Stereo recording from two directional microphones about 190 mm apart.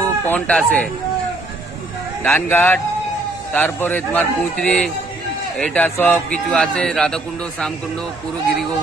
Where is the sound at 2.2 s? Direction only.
10° left (ahead or behind).